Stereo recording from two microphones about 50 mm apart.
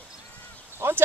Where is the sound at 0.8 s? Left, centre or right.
Right.